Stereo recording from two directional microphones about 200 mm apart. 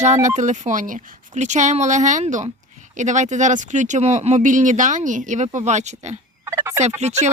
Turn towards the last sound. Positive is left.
turn(degrees=-35)  # may be behind; listen again after turning